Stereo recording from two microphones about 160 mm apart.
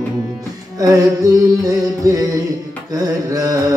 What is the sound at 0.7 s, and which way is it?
Music, 20° right (ahead or behind).